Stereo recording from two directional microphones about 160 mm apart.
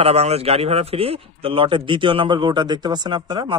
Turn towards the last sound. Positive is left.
turn(degrees=-25)  # may be behind; listen again after turning